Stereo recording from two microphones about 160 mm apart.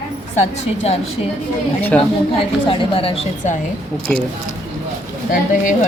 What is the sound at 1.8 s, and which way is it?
Speech, 10° left (ahead or behind).